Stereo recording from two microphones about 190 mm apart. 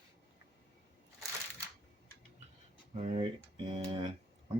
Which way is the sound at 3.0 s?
35° right (ahead or behind).